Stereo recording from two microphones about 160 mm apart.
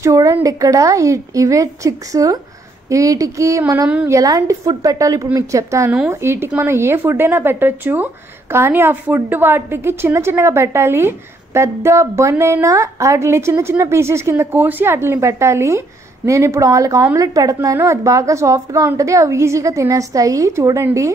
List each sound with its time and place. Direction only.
0.0 s a woman's voice: 20° right (ahead or behind)